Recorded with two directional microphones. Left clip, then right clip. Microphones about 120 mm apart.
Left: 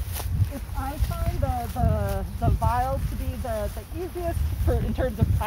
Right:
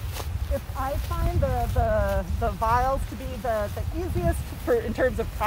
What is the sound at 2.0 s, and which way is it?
Speech, 35° right (ahead or behind).